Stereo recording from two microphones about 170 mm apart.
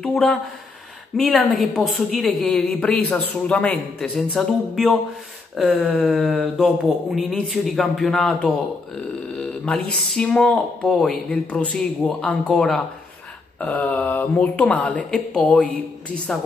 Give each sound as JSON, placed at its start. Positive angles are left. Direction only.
{"t": 0.0, "sound": "a woman's voice", "side_deg": 5}